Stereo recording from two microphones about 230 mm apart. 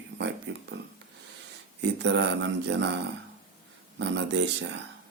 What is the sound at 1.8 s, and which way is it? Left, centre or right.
Speech, right.